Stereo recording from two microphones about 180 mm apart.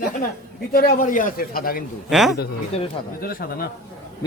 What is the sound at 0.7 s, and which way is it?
A man's voice, 50° left (ahead or behind).